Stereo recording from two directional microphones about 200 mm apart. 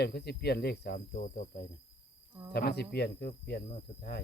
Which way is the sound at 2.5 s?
55° left (ahead or behind).